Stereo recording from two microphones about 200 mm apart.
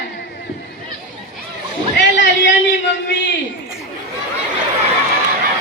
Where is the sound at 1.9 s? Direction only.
60° left (ahead or behind).